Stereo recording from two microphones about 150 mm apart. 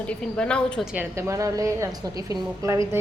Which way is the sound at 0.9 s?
20° right (ahead or behind).